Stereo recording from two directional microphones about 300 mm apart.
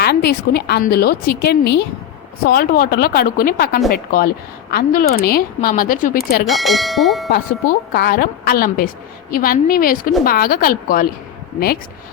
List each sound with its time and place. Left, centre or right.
0.0 s a woman's voice: left
6.4 s speech: centre
7.9 s speech: left